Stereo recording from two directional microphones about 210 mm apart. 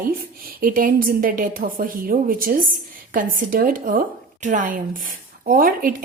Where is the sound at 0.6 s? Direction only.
40° right (ahead or behind).